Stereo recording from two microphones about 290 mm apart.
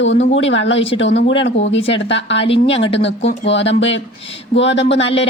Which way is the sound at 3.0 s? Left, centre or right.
Left.